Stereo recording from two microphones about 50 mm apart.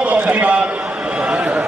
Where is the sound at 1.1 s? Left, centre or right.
Right.